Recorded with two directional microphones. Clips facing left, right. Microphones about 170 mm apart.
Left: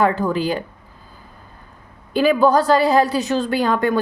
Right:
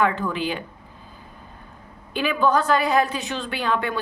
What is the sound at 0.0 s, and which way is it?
Speech, 40° left (ahead or behind).